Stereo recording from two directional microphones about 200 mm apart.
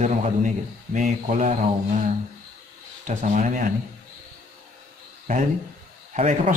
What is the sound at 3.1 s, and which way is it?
Speech, 35° right (ahead or behind).